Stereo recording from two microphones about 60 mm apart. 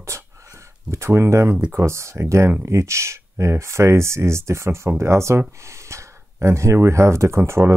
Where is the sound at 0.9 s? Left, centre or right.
Right.